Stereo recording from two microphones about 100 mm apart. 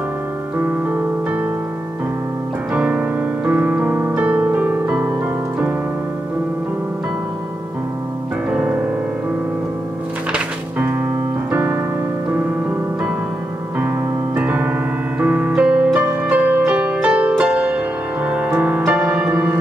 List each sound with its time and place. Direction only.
0.6 s keyboard: 20° right (ahead or behind)
2.7 s music: 15° right (ahead or behind)
8.5 s music: 10° right (ahead or behind)
10.3 s music: 15° right (ahead or behind)
11.5 s piano: 15° right (ahead or behind)
14.3 s keyboard: 15° right (ahead or behind)
15.1 s music: 15° right (ahead or behind)